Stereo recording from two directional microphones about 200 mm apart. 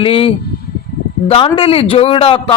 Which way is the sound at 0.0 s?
30° left (ahead or behind).